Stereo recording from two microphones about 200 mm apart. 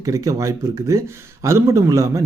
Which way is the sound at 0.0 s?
15° right (ahead or behind).